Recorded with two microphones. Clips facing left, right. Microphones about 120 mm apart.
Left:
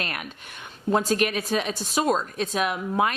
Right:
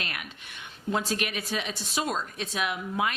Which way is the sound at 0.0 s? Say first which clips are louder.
Left 5 dB; 45° left (ahead or behind).